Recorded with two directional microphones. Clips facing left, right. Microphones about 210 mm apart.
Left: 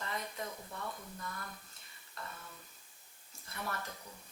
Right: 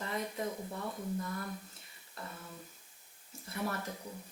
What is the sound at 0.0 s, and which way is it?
Speech, 10° right (ahead or behind).